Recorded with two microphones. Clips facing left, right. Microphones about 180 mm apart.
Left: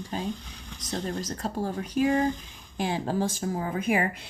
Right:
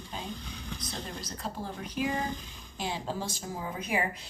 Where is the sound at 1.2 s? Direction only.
40° left (ahead or behind).